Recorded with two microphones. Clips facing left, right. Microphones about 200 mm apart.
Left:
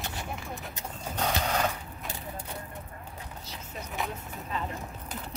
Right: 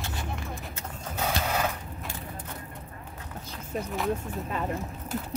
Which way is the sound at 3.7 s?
50° right (ahead or behind).